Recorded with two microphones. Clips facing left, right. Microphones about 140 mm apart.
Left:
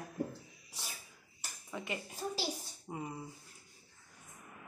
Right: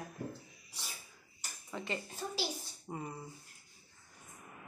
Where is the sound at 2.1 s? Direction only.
35° left (ahead or behind).